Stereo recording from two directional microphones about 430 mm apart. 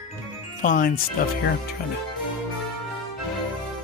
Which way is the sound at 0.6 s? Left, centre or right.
Centre.